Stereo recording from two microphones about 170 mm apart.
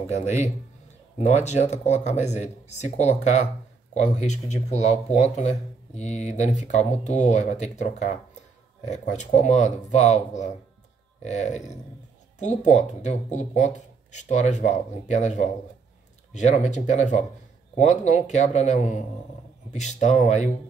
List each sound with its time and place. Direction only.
0.0 s speech: 40° left (ahead or behind)